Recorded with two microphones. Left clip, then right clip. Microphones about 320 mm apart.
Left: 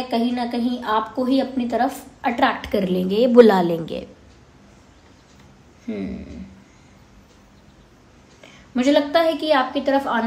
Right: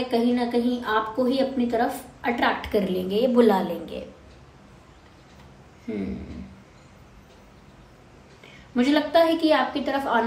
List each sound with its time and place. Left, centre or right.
0.1 s a woman's voice: left
5.9 s a woman's voice: left
8.7 s a woman's voice: left